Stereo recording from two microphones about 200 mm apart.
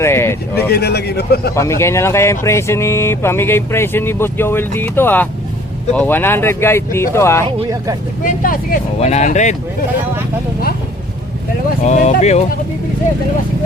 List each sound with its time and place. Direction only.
0.0 s a sound: 10° left (ahead or behind)
0.7 s speech: 55° left (ahead or behind)
1.5 s speech: 15° left (ahead or behind)
8.2 s speech: 40° left (ahead or behind)
11.9 s speech: 35° left (ahead or behind)